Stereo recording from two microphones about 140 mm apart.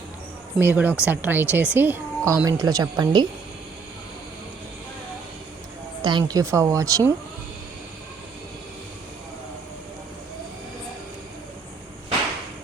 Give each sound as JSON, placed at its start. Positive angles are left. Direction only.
{"t": 0.6, "sound": "a woman's voice", "side_deg": -10}
{"t": 6.0, "sound": "a woman's voice", "side_deg": -35}